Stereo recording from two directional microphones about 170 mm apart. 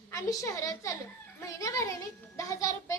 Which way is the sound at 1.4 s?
20° left (ahead or behind).